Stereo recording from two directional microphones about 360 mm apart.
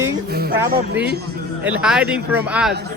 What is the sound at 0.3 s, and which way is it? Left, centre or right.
Music, right.